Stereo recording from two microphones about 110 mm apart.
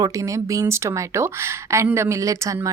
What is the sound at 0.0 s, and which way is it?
A woman's voice, 30° right (ahead or behind).